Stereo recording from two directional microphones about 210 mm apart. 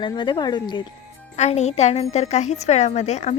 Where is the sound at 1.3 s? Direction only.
35° left (ahead or behind).